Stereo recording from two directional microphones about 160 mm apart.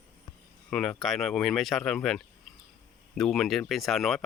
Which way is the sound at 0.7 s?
5° left (ahead or behind).